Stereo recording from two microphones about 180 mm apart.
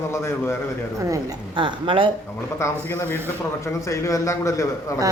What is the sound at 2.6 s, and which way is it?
A man's voice, 15° left (ahead or behind).